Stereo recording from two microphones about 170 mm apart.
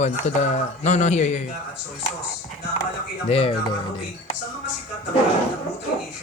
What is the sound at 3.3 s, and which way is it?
Speech, 35° left (ahead or behind).